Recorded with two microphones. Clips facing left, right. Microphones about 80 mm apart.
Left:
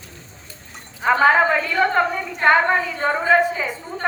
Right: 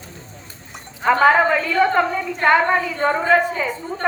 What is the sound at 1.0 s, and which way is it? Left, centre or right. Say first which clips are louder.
A woman's voice: right 1 dB; centre.